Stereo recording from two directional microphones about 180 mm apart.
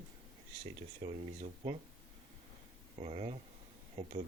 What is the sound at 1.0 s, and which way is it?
Speech, 35° right (ahead or behind).